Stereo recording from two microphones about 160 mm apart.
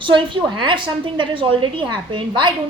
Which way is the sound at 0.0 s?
30° right (ahead or behind).